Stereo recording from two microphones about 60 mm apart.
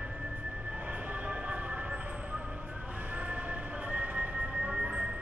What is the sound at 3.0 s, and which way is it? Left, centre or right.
Train, right.